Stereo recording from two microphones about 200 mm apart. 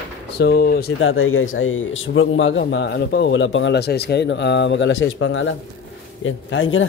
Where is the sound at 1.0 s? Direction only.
90° left.